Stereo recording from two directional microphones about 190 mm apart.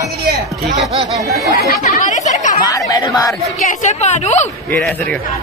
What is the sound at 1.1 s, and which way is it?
Speech, 20° right (ahead or behind).